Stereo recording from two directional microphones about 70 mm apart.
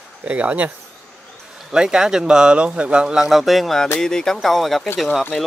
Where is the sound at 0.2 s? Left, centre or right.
Right.